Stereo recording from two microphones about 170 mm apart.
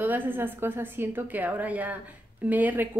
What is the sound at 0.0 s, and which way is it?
A woman's voice, 10° right (ahead or behind).